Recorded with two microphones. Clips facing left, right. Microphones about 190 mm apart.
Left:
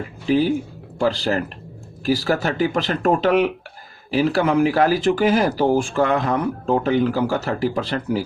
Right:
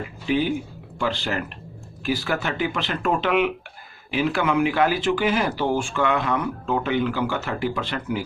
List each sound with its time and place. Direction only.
0.3 s speech: 40° left (ahead or behind)